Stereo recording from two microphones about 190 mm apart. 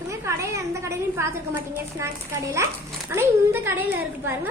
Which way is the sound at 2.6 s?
15° right (ahead or behind).